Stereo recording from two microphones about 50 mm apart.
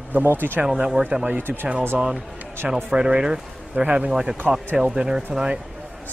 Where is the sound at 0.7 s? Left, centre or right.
Centre.